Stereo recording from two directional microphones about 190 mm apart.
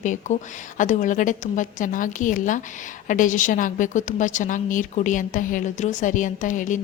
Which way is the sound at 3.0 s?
40° left (ahead or behind).